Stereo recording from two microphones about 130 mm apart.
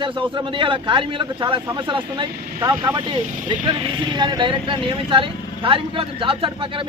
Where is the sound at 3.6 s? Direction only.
35° right (ahead or behind).